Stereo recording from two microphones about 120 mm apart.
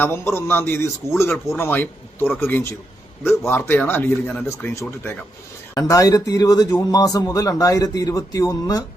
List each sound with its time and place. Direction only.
0.0 s speech: 20° left (ahead or behind)